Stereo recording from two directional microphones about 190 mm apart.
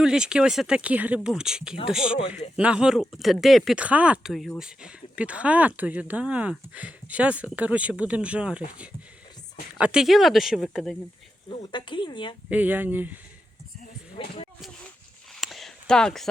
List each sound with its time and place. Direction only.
0.0 s speech: 5° right (ahead or behind)
11.6 s speech: 25° left (ahead or behind)
12.5 s speech: 10° right (ahead or behind)
14.2 s speech: 30° left (ahead or behind)
15.4 s a sound: centre (ahead or behind)